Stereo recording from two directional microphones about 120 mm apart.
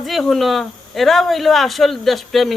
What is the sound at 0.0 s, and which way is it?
Speech, centre (ahead or behind).